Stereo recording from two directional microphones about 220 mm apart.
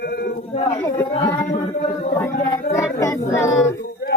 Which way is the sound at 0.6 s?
10° left (ahead or behind).